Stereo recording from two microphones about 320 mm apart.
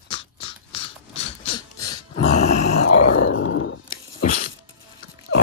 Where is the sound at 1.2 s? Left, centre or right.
Centre.